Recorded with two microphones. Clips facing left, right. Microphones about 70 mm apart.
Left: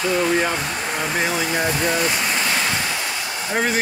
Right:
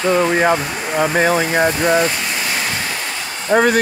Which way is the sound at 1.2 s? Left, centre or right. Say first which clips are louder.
Right 6 dB; right.